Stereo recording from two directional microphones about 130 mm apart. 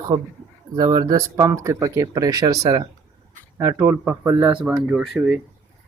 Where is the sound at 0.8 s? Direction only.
30° right (ahead or behind).